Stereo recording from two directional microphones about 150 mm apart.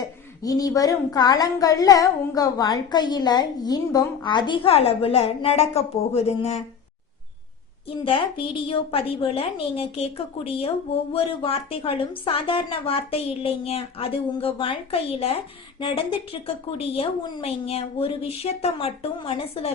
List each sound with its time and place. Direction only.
0.4 s speech: 25° left (ahead or behind); by 6.6 s 45° left (ahead or behind)
7.9 s a woman's voice: 35° left (ahead or behind)